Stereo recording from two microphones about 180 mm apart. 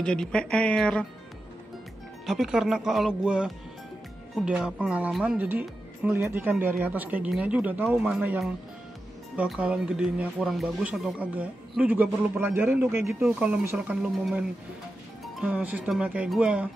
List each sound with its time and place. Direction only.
0.0 s speech: 5° left (ahead or behind)
2.2 s speech: centre (ahead or behind)
15.4 s speech: 5° right (ahead or behind)